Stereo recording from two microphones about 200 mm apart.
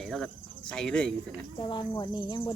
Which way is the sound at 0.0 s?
Centre (ahead or behind).